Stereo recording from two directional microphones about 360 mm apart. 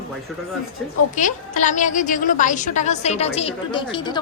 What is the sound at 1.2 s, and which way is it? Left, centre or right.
A woman's voice, left.